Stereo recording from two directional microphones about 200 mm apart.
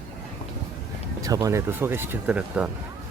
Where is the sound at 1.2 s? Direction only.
15° right (ahead or behind).